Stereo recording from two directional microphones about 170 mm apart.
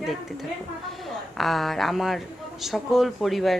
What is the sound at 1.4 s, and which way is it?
Speech, centre (ahead or behind).